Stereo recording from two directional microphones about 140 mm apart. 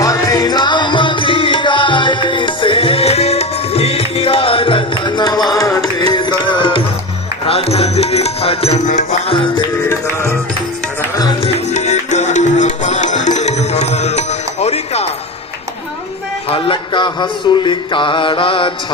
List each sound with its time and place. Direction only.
0.0 s music: 25° left (ahead or behind); by 9.6 s 40° left (ahead or behind)
11.1 s music: 30° left (ahead or behind)
11.4 s music: 55° left (ahead or behind)
16.5 s mantra: 40° left (ahead or behind)